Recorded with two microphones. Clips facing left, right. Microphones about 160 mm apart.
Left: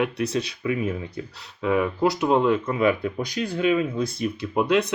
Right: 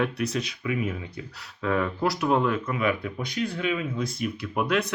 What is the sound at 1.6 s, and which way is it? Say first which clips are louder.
Speech: left 4 dB; 15° left (ahead or behind).